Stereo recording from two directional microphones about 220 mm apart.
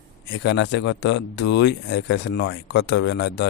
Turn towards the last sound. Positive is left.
turn(degrees=50)  # may be behind; listen again after turning